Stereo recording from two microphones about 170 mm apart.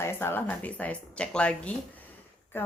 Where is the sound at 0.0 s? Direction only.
15° left (ahead or behind).